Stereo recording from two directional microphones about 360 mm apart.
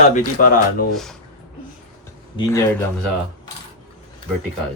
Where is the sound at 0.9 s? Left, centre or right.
Centre.